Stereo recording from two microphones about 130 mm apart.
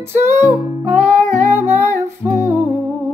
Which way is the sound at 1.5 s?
20° right (ahead or behind).